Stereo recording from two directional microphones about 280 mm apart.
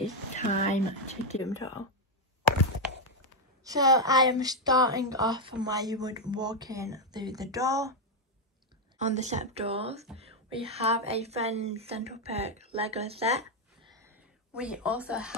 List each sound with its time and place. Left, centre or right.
0.3 s speech: left
1.4 s speech: centre
3.6 s speech: centre
8.9 s a woman's voice: right
13.9 s a sound: centre